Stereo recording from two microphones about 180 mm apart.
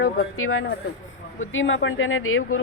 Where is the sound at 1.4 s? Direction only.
90° left.